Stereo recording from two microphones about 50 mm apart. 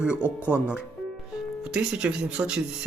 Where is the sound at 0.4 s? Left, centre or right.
Right.